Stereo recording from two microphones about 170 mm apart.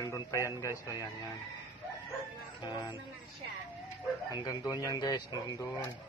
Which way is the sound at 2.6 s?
25° left (ahead or behind).